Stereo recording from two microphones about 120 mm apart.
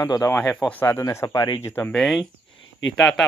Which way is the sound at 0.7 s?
15° left (ahead or behind).